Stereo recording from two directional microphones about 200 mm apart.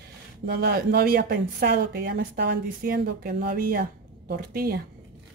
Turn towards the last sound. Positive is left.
turn(degrees=-50)  # may be behind; listen again after turning